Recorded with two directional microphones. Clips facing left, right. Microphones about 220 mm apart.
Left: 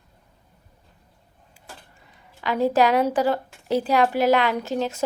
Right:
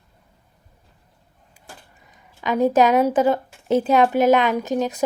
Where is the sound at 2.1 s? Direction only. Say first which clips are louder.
Right 3 dB; 20° right (ahead or behind).